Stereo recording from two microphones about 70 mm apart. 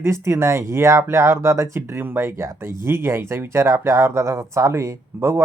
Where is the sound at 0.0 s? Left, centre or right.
Right.